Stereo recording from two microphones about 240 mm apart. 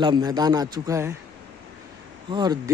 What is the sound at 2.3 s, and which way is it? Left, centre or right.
Speech, centre.